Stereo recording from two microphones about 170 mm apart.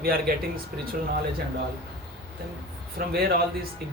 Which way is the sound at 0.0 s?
60° right (ahead or behind).